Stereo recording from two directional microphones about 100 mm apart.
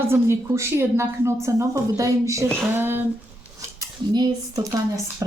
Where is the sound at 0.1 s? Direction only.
30° right (ahead or behind).